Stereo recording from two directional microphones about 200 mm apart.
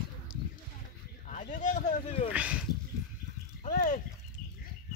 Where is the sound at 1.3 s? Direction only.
40° left (ahead or behind).